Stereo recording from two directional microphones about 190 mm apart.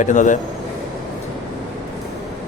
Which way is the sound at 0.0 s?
40° left (ahead or behind).